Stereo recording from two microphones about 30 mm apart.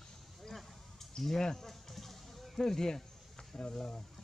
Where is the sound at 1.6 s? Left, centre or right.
Centre.